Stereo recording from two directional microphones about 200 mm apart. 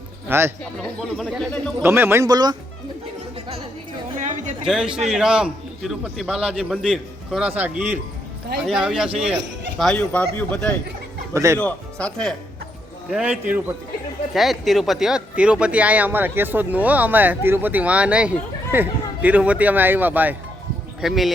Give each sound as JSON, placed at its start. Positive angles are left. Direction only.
{"t": 0.3, "sound": "speech", "side_deg": -10}
{"t": 0.8, "sound": "a man's voice", "side_deg": 5}
{"t": 1.8, "sound": "speech", "side_deg": -10}
{"t": 4.2, "sound": "a woman's voice", "side_deg": -35}
{"t": 4.6, "sound": "a man's voice", "side_deg": -5}
{"t": 11.3, "sound": "speech", "side_deg": -15}
{"t": 11.6, "sound": "a man's voice", "side_deg": 5}